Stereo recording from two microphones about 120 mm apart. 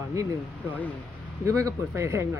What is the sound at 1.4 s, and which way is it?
Speech, 25° right (ahead or behind).